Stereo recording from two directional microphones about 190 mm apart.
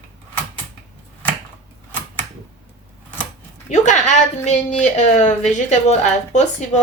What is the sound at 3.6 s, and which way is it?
Speech, 40° left (ahead or behind).